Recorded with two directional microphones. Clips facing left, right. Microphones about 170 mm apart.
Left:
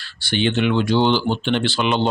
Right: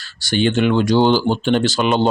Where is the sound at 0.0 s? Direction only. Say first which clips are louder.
Right 3 dB; 40° right (ahead or behind).